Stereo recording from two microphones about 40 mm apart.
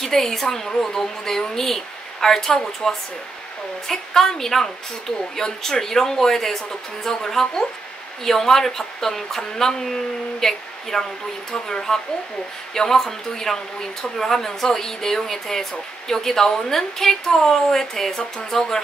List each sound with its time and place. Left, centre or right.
0.0 s speech: centre